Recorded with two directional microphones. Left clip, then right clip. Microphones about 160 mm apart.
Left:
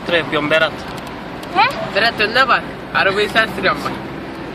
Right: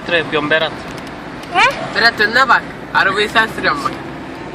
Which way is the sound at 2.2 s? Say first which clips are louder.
Right 2 dB; 55° right (ahead or behind).